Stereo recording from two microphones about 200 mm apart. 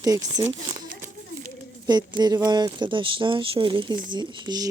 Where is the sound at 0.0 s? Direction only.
20° right (ahead or behind).